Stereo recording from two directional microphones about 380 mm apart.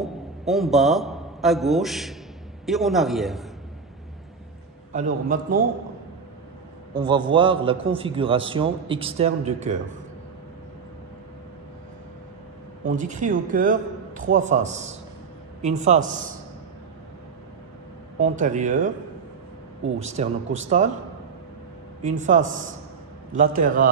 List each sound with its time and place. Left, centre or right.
0.0 s a man's voice: centre
4.9 s a man's voice: right
6.9 s a man's voice: centre
12.8 s a man's voice: centre
18.2 s a man's voice: centre
20.0 s a man's voice: centre
22.2 s a man's voice: centre